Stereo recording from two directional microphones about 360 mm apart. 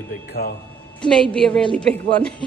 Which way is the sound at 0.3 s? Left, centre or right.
Left.